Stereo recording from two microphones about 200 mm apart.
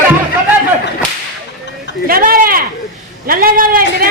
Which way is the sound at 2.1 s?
45° right (ahead or behind).